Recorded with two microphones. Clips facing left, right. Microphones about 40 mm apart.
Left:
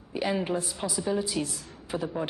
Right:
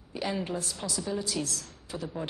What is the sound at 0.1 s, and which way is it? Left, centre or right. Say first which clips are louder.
A woman's voice: left 4 dB; centre.